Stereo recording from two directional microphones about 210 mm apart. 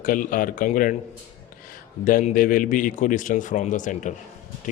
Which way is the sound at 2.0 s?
40° left (ahead or behind).